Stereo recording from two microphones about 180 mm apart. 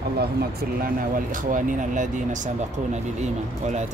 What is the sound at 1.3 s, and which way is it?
Speech, 45° right (ahead or behind).